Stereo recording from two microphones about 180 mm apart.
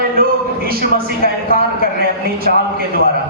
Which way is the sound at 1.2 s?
55° right (ahead or behind).